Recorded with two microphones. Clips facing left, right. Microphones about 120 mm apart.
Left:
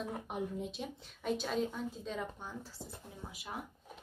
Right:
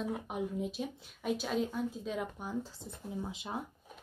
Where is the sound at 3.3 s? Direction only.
25° right (ahead or behind).